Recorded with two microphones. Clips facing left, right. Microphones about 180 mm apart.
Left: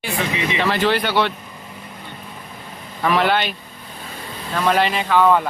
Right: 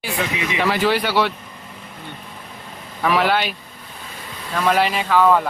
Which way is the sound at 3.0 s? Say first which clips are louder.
Even; 5° right (ahead or behind).